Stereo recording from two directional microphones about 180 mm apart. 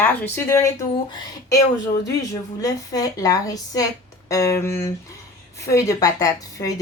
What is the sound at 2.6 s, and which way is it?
Speech, 20° left (ahead or behind).